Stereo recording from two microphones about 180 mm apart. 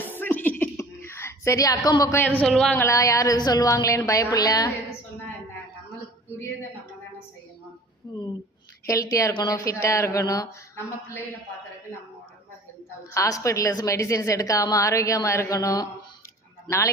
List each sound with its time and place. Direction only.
0.0 s a sound: 10° left (ahead or behind)
2.4 s speech: 5° left (ahead or behind)
2.8 s a woman's voice: 20° left (ahead or behind)
8.1 s a sound: 20° left (ahead or behind)
8.9 s a woman's voice: 20° left (ahead or behind)
13.1 s a woman's voice: 20° left (ahead or behind)